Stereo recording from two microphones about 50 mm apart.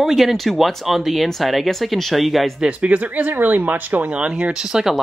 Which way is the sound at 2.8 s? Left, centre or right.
Right.